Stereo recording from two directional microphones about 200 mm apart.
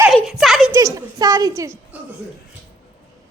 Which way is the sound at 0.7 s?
15° right (ahead or behind).